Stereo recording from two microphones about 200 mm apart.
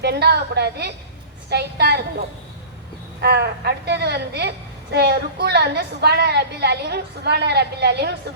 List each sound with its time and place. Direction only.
0.0 s a woman's voice: 55° right (ahead or behind)
3.2 s a woman's voice: 55° right (ahead or behind)